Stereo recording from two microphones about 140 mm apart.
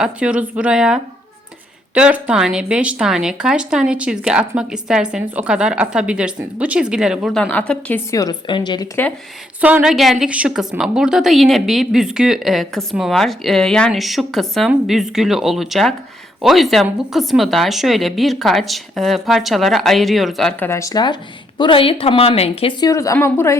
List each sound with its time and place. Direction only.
0.0 s speech: 10° right (ahead or behind); by 8.0 s 10° left (ahead or behind)
8.1 s a woman's voice: 25° left (ahead or behind)
9.6 s a woman's voice: 10° right (ahead or behind); by 20.7 s 5° left (ahead or behind)
20.7 s a woman's voice: 20° left (ahead or behind); by 22.7 s 45° left (ahead or behind)
22.8 s speech: 25° left (ahead or behind)